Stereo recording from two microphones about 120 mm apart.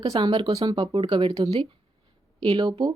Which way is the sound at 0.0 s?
35° right (ahead or behind).